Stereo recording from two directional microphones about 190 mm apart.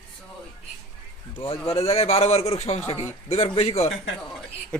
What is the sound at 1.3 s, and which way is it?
A man's voice, 30° left (ahead or behind).